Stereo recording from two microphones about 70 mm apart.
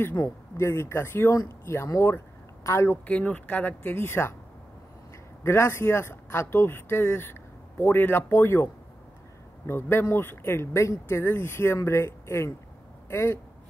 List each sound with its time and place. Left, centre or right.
0.2 s speech: left
2.0 s a sound: left
2.9 s speech: left
5.4 s speech: left
9.7 s speech: left